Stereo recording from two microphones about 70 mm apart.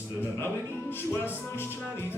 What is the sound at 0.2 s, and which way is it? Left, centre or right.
Speech, left.